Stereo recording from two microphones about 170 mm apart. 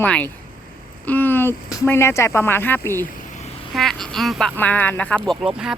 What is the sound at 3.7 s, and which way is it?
Speech, centre (ahead or behind).